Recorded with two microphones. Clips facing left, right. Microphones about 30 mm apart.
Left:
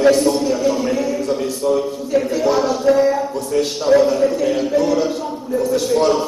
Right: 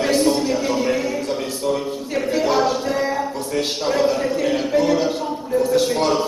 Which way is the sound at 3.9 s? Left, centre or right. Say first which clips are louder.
Left 6 dB; centre.